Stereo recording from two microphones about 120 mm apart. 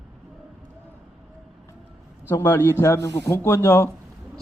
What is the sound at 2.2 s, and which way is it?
A man's voice, 20° left (ahead or behind).